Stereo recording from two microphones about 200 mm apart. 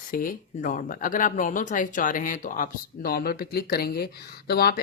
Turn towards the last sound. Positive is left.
turn(degrees=50)  # may be behind; listen again after turning